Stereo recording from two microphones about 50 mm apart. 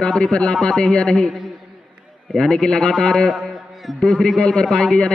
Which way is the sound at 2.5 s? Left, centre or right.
Centre.